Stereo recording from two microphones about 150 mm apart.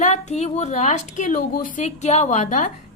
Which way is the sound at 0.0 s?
50° left (ahead or behind).